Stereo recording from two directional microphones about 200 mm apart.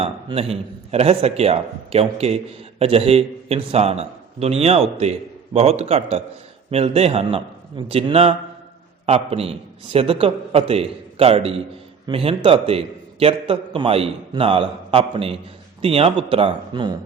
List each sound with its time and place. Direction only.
0.0 s a man's voice: 30° right (ahead or behind)